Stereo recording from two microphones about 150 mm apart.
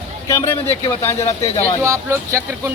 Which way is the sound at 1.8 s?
20° right (ahead or behind).